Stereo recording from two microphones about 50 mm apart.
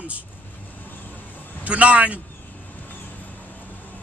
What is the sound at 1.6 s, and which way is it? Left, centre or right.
Speech, right.